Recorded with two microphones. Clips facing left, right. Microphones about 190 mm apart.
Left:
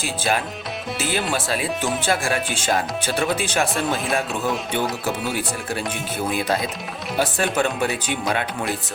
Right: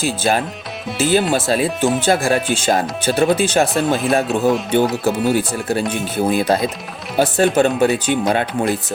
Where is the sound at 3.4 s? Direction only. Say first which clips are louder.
Right 7 dB; 35° right (ahead or behind).